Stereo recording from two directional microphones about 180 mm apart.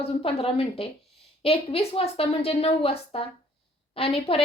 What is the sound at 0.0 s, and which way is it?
Speech, 30° left (ahead or behind).